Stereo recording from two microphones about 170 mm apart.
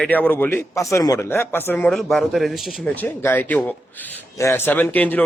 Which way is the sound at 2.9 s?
10° left (ahead or behind).